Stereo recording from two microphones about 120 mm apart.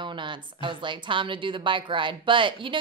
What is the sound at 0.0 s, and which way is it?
Speech, 40° right (ahead or behind).